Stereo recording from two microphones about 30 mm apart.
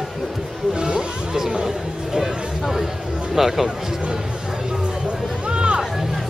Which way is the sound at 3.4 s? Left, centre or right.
Centre.